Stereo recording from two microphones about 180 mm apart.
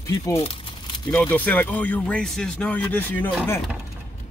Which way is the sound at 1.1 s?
10° left (ahead or behind).